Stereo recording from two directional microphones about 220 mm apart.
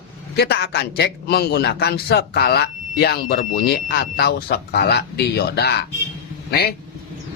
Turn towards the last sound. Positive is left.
turn(degrees=45)  # may be behind; listen again after turning